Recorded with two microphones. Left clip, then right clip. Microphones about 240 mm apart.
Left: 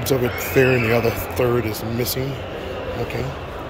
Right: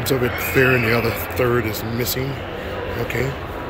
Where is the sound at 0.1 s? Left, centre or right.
Centre.